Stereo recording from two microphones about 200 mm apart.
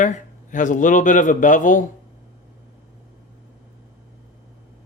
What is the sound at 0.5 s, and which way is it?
Speech, 40° left (ahead or behind).